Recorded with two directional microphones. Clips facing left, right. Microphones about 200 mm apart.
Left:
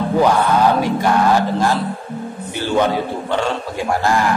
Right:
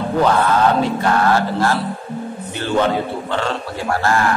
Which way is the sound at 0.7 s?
15° left (ahead or behind).